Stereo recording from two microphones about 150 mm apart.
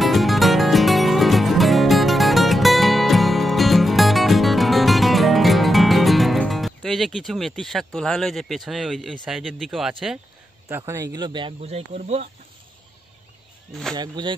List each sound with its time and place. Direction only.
0.0 s music: centre (ahead or behind)
10.9 s a man's voice: 20° right (ahead or behind)
11.6 s speech: 45° right (ahead or behind)
13.9 s a man's voice: 30° right (ahead or behind)